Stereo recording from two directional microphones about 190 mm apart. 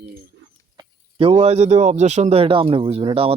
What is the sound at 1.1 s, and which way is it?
Speech, 30° right (ahead or behind).